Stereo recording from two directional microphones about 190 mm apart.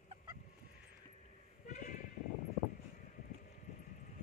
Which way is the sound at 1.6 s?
40° left (ahead or behind).